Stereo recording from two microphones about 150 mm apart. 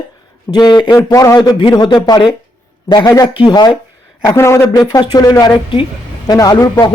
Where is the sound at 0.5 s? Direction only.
30° left (ahead or behind).